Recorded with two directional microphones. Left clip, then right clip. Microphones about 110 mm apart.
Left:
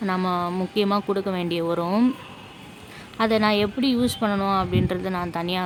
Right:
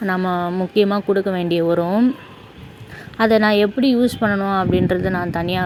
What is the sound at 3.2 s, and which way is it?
A woman's voice, 35° right (ahead or behind).